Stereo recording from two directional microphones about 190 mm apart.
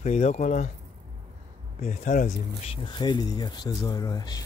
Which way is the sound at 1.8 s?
40° left (ahead or behind).